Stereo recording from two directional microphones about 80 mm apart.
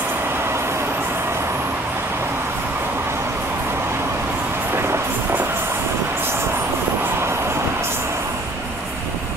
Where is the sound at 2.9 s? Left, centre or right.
Right.